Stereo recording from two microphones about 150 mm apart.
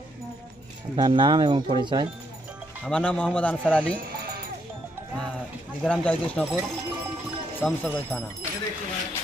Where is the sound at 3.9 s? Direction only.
80° right.